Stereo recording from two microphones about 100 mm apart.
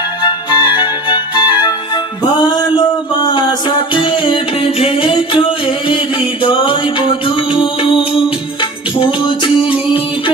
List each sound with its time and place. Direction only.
0.2 s music: 50° left (ahead or behind)
4.8 s singing: 65° left (ahead or behind)
5.9 s music: 55° left (ahead or behind)
9.0 s music: 55° left (ahead or behind)